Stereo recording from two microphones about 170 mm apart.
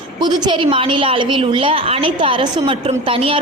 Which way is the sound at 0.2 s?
25° right (ahead or behind).